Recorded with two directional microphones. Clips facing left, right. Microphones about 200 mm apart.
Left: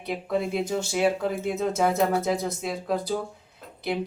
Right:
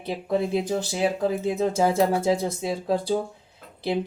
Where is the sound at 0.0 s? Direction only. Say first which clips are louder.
Right 2 dB; 30° right (ahead or behind).